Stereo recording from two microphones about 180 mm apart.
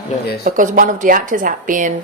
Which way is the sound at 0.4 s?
50° right (ahead or behind).